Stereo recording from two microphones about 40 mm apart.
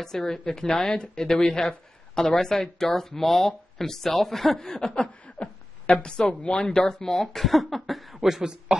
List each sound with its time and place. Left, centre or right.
0.0 s a woman's voice: centre
5.2 s a sound: left
6.6 s a woman's voice: centre
7.3 s speech: centre